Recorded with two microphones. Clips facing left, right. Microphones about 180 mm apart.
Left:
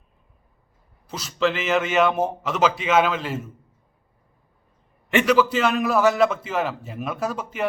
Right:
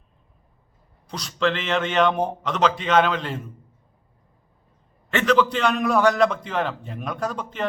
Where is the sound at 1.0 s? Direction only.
5° left (ahead or behind).